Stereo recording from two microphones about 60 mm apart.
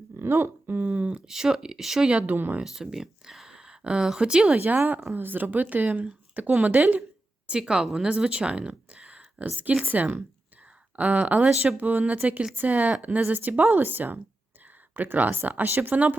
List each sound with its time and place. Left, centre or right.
0.2 s speech: right
0.7 s a sound: right
1.3 s speech: centre
2.0 s speech: right
2.6 s speech: centre
4.5 s speech: right